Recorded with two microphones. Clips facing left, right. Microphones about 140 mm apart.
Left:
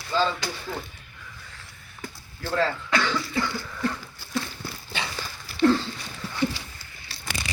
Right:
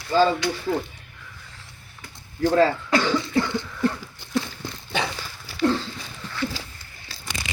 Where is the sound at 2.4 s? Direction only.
15° right (ahead or behind).